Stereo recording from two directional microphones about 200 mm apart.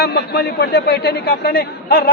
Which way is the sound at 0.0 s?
50° left (ahead or behind).